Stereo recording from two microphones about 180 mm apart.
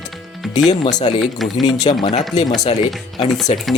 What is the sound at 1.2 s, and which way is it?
Music, centre (ahead or behind).